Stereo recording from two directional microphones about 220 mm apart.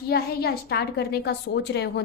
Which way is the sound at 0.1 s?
45° left (ahead or behind).